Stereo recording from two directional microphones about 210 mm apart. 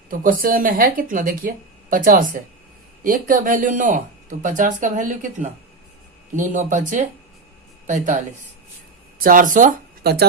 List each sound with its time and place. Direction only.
0.1 s speech: 40° right (ahead or behind)